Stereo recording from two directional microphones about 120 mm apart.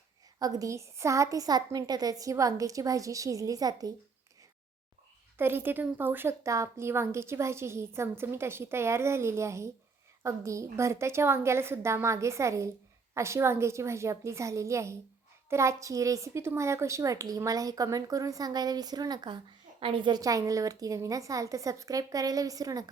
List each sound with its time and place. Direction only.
0.3 s a woman's voice: 30° right (ahead or behind)
5.4 s a woman's voice: 20° right (ahead or behind)